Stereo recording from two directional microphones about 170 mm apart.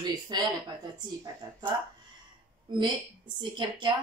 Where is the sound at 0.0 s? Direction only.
25° right (ahead or behind).